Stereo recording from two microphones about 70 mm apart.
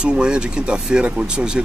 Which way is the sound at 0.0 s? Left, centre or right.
Centre.